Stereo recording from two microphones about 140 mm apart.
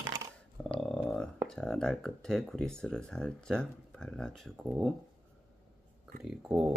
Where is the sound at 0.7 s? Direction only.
5° left (ahead or behind).